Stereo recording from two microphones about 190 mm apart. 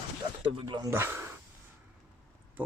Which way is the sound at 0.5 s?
25° right (ahead or behind).